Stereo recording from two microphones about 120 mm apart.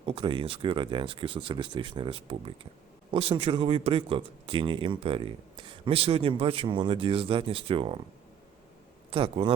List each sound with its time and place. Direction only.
0.0 s speech: 45° right (ahead or behind)
9.0 s speech: 50° right (ahead or behind)